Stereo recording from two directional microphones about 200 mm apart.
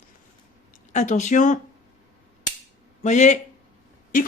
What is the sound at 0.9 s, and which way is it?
Speech, 35° left (ahead or behind).